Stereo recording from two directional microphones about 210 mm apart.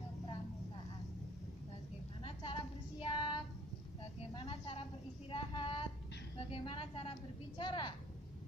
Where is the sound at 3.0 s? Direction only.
25° left (ahead or behind).